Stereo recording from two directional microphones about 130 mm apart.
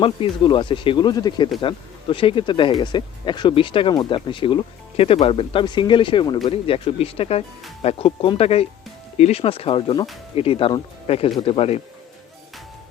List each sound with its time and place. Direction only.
0.0 s speech: 40° left (ahead or behind)